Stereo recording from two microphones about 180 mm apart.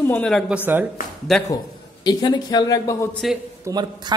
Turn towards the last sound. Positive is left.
turn(degrees=-25)  # may be behind; listen again after turning